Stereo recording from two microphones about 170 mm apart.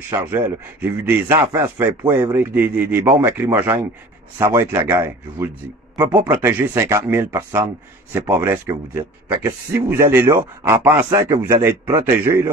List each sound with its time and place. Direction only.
0.1 s a man's voice: 15° right (ahead or behind)